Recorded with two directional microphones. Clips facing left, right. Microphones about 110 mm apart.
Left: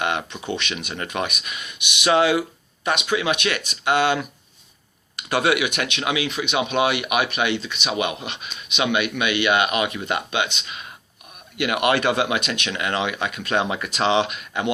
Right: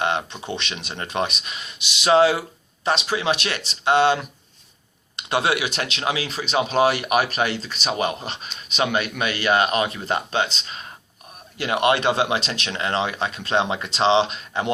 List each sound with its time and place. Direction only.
0.0 s speech: 25° right (ahead or behind)